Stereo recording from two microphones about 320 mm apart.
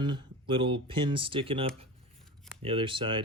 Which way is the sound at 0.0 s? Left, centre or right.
Centre.